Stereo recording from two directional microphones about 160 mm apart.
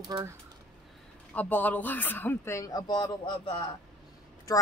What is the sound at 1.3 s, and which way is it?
Speech, 10° left (ahead or behind).